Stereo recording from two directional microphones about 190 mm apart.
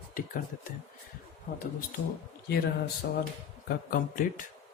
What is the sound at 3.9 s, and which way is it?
Speech, 45° left (ahead or behind).